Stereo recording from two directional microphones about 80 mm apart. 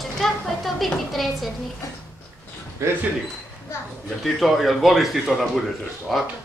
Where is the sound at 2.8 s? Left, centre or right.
Right.